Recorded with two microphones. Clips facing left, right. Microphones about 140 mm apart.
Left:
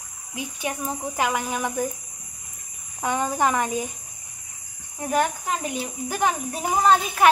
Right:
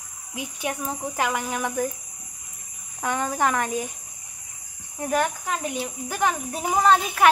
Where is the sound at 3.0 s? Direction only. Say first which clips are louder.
Left 1 dB; 10° left (ahead or behind).